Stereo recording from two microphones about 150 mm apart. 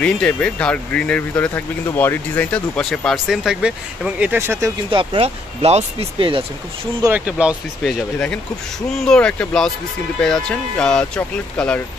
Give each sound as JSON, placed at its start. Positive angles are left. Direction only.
{"t": 0.0, "sound": "speech", "side_deg": 5}
{"t": 4.9, "sound": "speech", "side_deg": -40}
{"t": 7.1, "sound": "speech", "side_deg": -10}
{"t": 8.9, "sound": "speech", "side_deg": 5}